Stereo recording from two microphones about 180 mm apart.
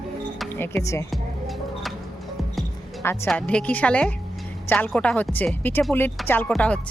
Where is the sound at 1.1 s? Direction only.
Centre (ahead or behind).